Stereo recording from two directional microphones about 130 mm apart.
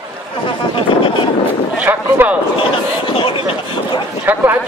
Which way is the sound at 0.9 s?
40° left (ahead or behind).